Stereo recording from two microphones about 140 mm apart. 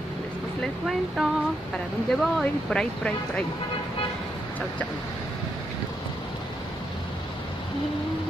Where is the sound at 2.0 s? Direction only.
5° left (ahead or behind).